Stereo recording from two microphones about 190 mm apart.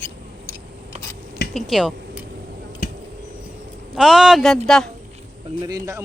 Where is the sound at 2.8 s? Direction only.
45° left (ahead or behind).